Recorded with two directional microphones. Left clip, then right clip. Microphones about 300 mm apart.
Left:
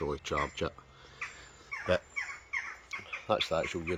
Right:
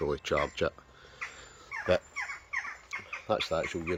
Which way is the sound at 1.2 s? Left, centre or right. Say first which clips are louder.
Right 1 dB; centre.